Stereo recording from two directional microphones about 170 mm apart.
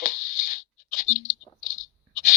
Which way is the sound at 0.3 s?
55° left (ahead or behind).